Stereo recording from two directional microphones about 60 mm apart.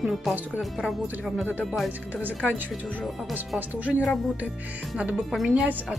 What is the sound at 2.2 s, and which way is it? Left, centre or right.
Speech, right.